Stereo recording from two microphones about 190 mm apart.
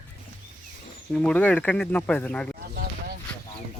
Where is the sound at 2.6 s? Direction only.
50° right (ahead or behind).